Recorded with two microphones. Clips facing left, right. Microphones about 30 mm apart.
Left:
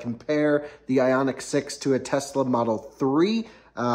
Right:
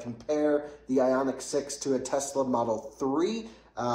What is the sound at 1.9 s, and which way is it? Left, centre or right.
Speech, left.